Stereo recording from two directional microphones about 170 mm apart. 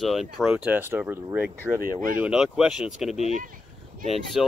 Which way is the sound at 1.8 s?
55° right (ahead or behind).